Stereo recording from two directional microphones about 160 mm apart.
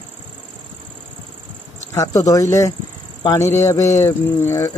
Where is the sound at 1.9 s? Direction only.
20° left (ahead or behind).